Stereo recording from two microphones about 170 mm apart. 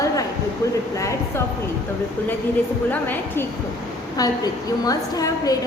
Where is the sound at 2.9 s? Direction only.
10° left (ahead or behind).